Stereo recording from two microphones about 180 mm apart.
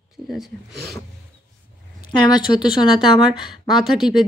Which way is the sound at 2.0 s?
25° left (ahead or behind).